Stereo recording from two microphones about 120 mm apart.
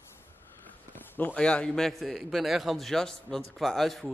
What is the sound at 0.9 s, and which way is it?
A man's voice, 15° left (ahead or behind).